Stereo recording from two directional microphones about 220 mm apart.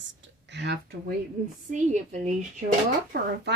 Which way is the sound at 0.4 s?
50° right (ahead or behind).